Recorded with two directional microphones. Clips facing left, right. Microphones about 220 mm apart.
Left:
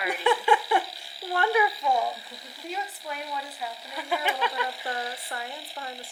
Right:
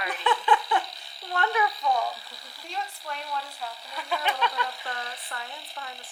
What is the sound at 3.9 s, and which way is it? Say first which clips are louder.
Speech: left 2 dB; 20° left (ahead or behind).